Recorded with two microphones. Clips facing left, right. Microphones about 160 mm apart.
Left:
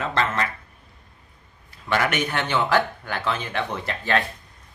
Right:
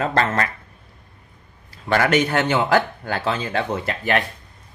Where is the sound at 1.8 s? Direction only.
40° right (ahead or behind).